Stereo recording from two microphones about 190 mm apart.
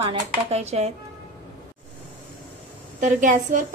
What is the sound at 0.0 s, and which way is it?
Speech, 30° right (ahead or behind).